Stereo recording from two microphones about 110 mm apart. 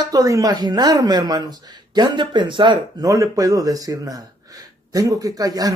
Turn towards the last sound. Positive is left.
turn(degrees=-35)  # may be behind; listen again after turning